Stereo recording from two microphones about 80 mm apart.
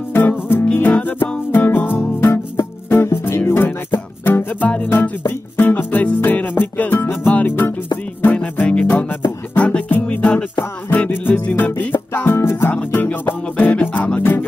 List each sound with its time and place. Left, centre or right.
0.1 s music: left
8.4 s music: centre